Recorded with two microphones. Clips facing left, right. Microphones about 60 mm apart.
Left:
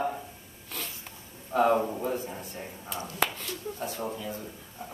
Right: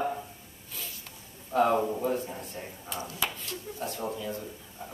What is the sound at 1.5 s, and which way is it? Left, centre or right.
Speech, centre.